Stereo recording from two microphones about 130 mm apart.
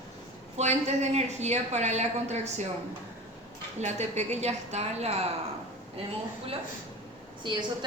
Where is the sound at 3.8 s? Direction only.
60° right (ahead or behind).